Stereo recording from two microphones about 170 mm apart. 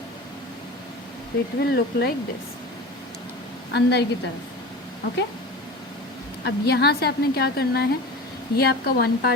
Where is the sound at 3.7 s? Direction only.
90° left.